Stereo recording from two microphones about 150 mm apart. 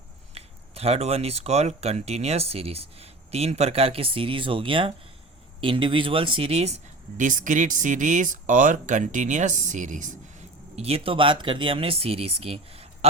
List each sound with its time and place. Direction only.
0.3 s speech: 40° right (ahead or behind)
7.2 s speech: 60° right (ahead or behind)
10.8 s speech: 40° right (ahead or behind)